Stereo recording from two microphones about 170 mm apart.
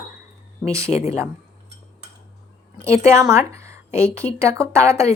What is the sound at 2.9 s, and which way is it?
A woman's voice, 15° right (ahead or behind).